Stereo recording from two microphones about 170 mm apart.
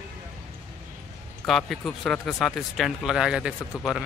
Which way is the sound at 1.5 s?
Centre (ahead or behind).